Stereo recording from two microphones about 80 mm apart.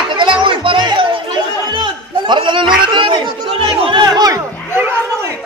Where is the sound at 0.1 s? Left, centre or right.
Right.